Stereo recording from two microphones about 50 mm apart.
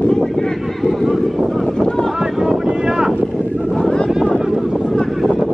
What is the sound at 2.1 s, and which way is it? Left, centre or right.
Boat, centre.